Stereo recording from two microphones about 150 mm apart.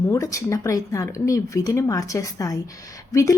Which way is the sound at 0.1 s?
20° left (ahead or behind).